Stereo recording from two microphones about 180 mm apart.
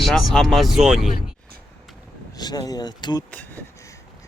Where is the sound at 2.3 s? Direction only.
20° left (ahead or behind).